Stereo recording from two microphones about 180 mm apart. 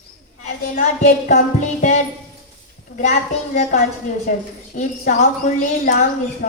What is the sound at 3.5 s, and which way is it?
A woman's voice, 45° left (ahead or behind).